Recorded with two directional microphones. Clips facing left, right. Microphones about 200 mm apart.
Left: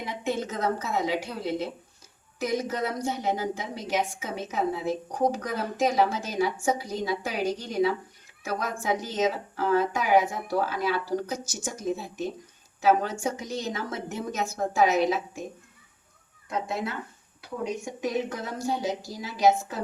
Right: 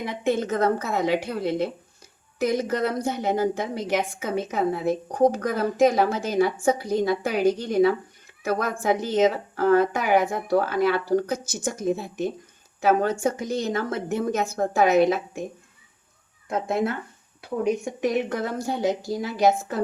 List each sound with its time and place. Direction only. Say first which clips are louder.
0.0 s a woman's voice: right 5 dB; 55° right (ahead or behind)
16.5 s a woman's voice: right 6 dB; 50° right (ahead or behind)